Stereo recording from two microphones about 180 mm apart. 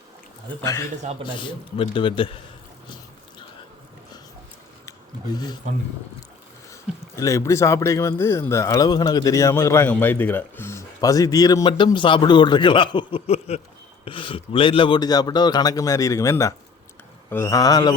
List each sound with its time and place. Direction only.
0.6 s a man's voice: 15° left (ahead or behind)
1.2 s speech: 30° left (ahead or behind)
4.9 s a sound: 20° left (ahead or behind)
7.2 s speech: 15° left (ahead or behind)